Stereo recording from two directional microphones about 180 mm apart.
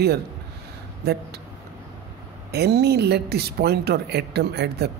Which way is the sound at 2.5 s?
65° right (ahead or behind).